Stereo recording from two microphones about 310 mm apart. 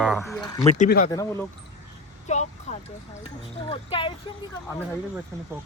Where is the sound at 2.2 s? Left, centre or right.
Left.